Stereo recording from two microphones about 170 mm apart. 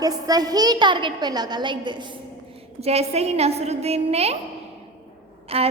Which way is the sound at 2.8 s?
40° right (ahead or behind).